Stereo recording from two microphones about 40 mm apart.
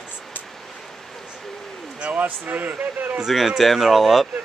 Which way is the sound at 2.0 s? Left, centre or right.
Right.